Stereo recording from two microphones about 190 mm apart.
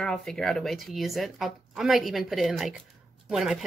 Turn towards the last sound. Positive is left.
turn(degrees=0)  # may be behind; listen again after turning